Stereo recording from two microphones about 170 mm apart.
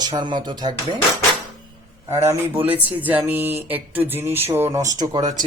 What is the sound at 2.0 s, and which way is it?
Speech, 15° right (ahead or behind).